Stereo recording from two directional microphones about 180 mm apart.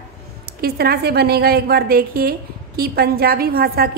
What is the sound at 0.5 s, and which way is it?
A woman's voice, 60° right (ahead or behind).